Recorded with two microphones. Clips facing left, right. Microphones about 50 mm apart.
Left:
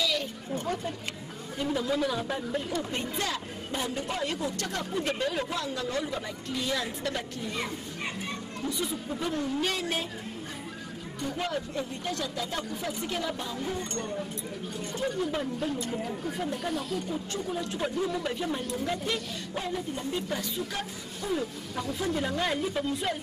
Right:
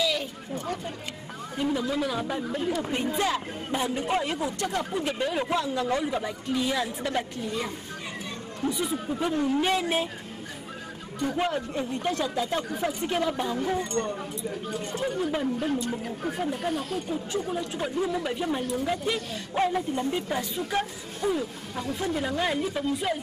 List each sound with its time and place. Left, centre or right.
0.0 s a sound: centre
1.6 s speech: centre
2.8 s a man's voice: centre
5.5 s a man's voice: right
8.6 s speech: centre
11.2 s speech: right
13.6 s speech: right
14.9 s speech: right
15.6 s speech: right
17.1 s a man's voice: centre
19.6 s speech: right
21.3 s a man's voice: centre
21.8 s speech: right
22.1 s speech: centre